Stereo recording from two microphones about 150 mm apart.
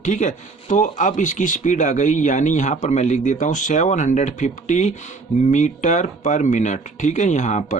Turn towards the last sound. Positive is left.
turn(degrees=55)  # may be behind; listen again after turning